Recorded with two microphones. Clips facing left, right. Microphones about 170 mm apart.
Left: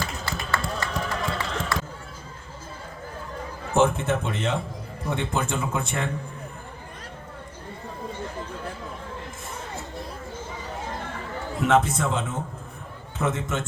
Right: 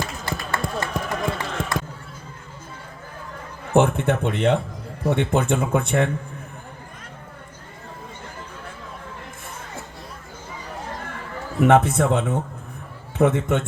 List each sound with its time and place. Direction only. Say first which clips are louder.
0.0 s a sound: right 3 dB; 50° right (ahead or behind)
3.8 s speech: right 3 dB; 60° right (ahead or behind)
11.6 s speech: right 5 dB; 55° right (ahead or behind)